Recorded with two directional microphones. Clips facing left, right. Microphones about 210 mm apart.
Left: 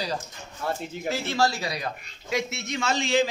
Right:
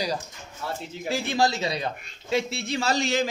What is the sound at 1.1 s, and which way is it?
Speech, 15° right (ahead or behind).